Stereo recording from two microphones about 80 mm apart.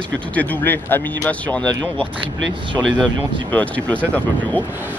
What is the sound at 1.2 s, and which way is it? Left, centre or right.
Speech, centre.